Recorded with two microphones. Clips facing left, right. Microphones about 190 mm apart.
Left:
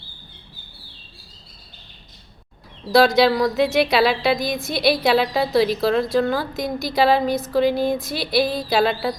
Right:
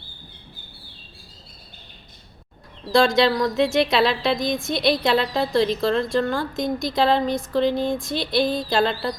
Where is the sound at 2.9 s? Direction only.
5° left (ahead or behind).